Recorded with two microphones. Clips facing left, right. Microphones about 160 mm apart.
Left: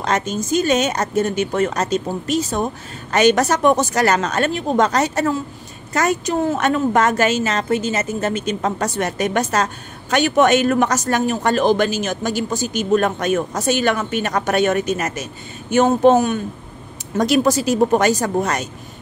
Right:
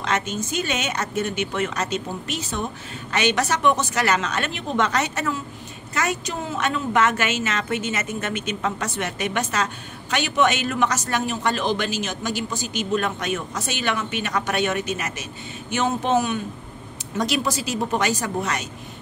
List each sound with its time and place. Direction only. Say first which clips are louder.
0.0 s a woman's voice: left 4 dB; 40° left (ahead or behind)